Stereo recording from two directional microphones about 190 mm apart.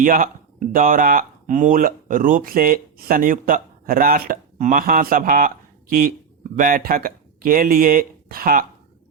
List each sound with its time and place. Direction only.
0.0 s speech: 45° right (ahead or behind)